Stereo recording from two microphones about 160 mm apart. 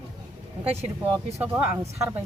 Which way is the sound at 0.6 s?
40° right (ahead or behind).